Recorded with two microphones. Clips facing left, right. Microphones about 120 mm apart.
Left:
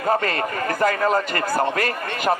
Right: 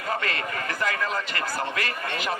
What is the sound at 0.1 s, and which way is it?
Speech, 45° left (ahead or behind).